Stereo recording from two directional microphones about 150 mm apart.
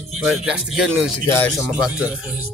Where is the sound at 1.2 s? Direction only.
20° left (ahead or behind).